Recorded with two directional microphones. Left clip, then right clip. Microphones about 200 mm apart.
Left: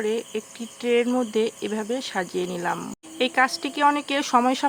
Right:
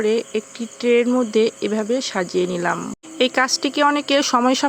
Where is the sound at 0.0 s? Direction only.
25° right (ahead or behind).